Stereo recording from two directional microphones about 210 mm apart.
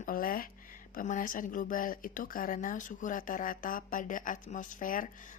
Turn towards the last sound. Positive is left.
turn(degrees=40)  # may be behind; listen again after turning